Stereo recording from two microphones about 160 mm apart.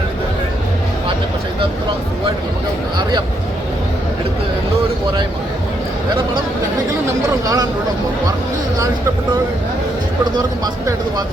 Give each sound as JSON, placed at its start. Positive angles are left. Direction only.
{"t": 3.0, "sound": "speech", "side_deg": -30}
{"t": 7.4, "sound": "speech", "side_deg": -20}